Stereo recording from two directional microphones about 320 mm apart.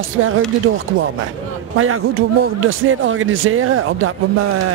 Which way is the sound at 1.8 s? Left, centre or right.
Right.